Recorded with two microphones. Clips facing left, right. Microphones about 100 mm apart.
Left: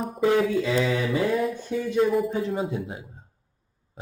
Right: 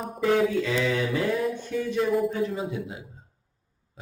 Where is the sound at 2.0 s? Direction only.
Centre (ahead or behind).